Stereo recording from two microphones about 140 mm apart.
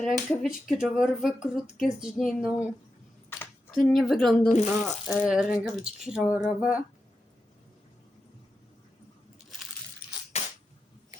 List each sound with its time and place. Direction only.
0.0 s speech: centre (ahead or behind)
3.2 s a sound: 15° left (ahead or behind)
3.8 s speech: centre (ahead or behind)
4.4 s speech: 55° left (ahead or behind)
5.0 s speech: 5° right (ahead or behind)